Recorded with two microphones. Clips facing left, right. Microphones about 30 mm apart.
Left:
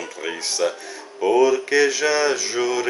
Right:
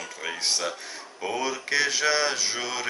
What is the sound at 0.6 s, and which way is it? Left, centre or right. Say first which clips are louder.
Mantra: left 9 dB; centre.